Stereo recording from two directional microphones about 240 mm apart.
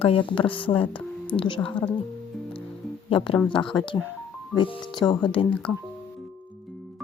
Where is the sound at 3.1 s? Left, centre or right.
Left.